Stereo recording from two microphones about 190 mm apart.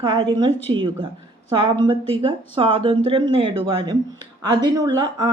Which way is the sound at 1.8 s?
30° right (ahead or behind).